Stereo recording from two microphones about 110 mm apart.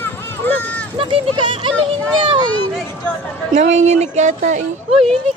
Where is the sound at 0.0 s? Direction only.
20° left (ahead or behind).